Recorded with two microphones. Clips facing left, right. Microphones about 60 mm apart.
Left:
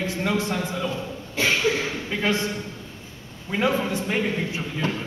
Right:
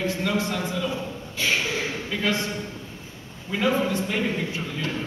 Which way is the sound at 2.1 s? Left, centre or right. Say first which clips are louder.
Left 2 dB; left.